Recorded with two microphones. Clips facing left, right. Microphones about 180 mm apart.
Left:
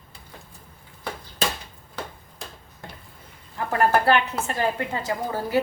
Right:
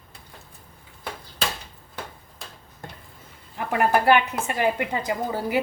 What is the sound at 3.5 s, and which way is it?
A woman's voice, 15° right (ahead or behind).